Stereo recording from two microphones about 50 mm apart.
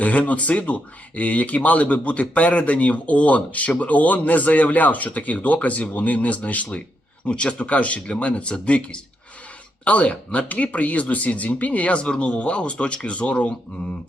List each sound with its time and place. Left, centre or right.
0.0 s speech: left